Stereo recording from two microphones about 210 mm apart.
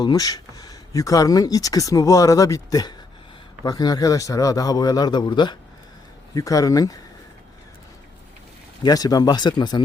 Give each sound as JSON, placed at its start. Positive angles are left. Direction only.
{"t": 0.0, "sound": "a man's voice", "side_deg": 20}
{"t": 8.8, "sound": "a man's voice", "side_deg": 20}